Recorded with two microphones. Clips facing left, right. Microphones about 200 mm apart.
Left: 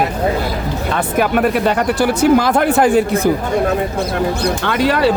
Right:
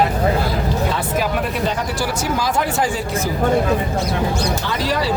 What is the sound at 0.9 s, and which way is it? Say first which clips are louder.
A man's voice: left 5 dB; 60° left (ahead or behind).